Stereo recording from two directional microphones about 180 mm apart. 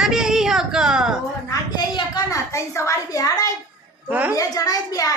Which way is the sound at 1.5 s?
20° left (ahead or behind).